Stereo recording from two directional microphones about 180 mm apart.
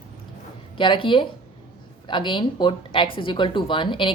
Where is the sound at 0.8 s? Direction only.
25° left (ahead or behind).